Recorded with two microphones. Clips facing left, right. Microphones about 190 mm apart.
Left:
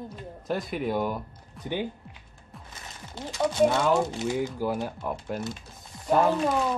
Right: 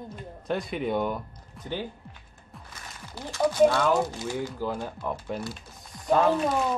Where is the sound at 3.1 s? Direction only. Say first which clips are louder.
Right 1 dB; 20° left (ahead or behind); by 5.4 s 5° left (ahead or behind).